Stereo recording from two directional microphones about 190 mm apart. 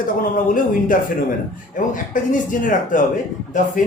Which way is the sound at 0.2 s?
45° left (ahead or behind).